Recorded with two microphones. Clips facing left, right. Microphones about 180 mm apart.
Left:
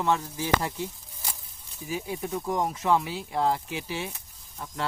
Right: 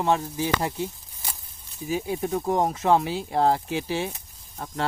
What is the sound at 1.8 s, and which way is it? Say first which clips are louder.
Speech: right 5 dB; 25° right (ahead or behind).